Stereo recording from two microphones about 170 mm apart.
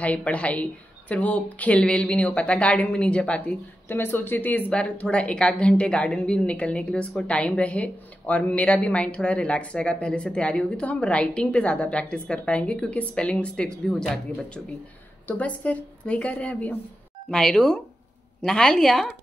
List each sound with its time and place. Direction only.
0.0 s a woman's voice: 10° left (ahead or behind)